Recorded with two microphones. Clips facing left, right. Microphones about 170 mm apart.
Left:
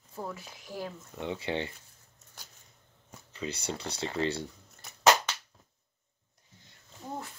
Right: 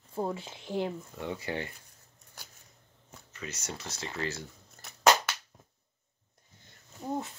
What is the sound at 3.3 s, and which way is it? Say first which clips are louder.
Speech: left 5 dB; 30° left (ahead or behind).